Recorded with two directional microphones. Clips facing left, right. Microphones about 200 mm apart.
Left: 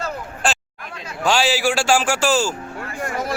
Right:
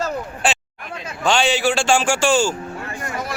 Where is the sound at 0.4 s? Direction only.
5° right (ahead or behind).